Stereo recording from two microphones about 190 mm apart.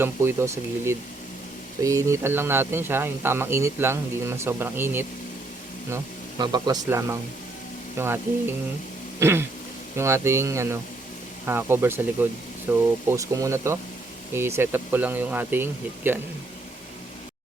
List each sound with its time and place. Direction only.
0.0 s speech: 10° right (ahead or behind)
6.4 s speech: 20° right (ahead or behind)
9.2 s speech: 15° right (ahead or behind)